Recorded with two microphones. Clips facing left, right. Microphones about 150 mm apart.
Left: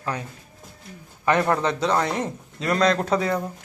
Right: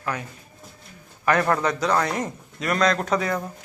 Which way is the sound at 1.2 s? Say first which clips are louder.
Even; 20° left (ahead or behind).